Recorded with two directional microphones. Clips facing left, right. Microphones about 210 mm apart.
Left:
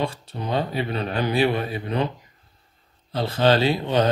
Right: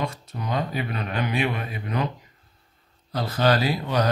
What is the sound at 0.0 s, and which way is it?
Speech, 30° left (ahead or behind).